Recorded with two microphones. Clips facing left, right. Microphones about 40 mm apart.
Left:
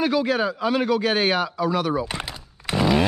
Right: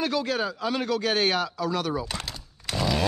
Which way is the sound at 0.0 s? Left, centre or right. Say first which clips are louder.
Left 5 dB; centre.